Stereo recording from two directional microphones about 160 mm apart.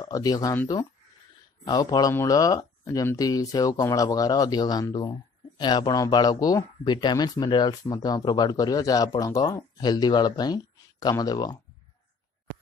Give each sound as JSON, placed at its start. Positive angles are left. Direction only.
{"t": 0.0, "sound": "speech", "side_deg": 25}
{"t": 1.7, "sound": "speech", "side_deg": 25}